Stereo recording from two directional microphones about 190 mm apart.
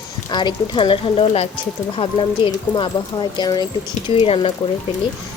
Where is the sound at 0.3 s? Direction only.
25° left (ahead or behind).